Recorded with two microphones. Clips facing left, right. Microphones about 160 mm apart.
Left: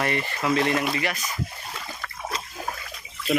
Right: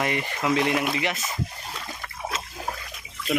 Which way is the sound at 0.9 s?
20° right (ahead or behind).